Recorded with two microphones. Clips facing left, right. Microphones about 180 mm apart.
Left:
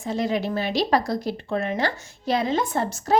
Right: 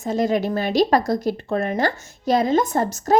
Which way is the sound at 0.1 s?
45° right (ahead or behind).